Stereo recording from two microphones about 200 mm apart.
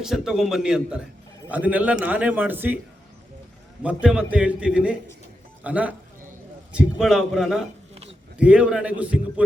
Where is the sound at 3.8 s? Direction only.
5° right (ahead or behind).